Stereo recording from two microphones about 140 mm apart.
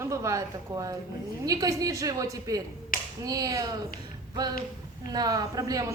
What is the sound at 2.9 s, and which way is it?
Finger snapping, 90° left.